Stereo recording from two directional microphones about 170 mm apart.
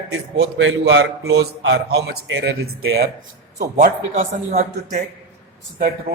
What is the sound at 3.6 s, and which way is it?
A man's voice, 50° right (ahead or behind).